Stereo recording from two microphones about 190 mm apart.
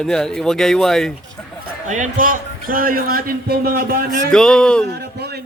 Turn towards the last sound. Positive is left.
turn(degrees=-60)  # may be behind; listen again after turning